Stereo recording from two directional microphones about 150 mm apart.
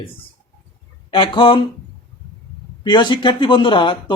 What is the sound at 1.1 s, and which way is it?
Speech, 35° left (ahead or behind).